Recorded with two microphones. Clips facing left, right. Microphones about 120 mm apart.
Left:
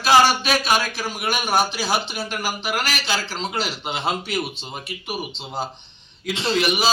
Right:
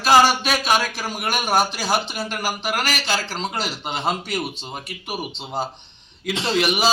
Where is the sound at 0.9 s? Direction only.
10° right (ahead or behind).